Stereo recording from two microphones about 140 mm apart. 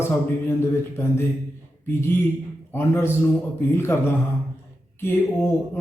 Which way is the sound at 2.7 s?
15° left (ahead or behind).